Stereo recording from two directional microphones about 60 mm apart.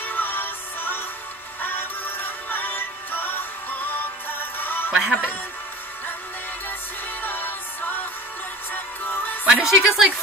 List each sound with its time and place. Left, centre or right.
0.0 s music: left
4.9 s a woman's voice: centre
7.2 s music: left
8.7 s music: left
9.5 s a woman's voice: centre